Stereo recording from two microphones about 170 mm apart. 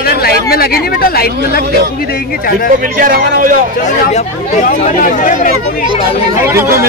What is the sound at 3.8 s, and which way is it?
Speech, 45° left (ahead or behind).